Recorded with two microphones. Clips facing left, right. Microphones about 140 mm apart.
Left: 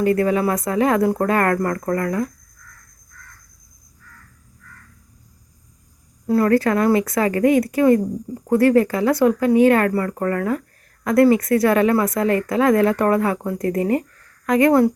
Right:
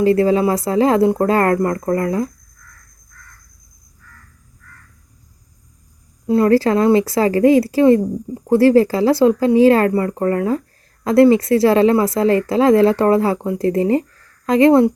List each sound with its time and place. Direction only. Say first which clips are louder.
0.0 s speech: right 4 dB; 30° right (ahead or behind)
6.2 s speech: right 3 dB; 25° right (ahead or behind)